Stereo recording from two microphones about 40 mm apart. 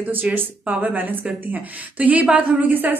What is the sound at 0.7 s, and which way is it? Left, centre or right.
A woman's voice, right.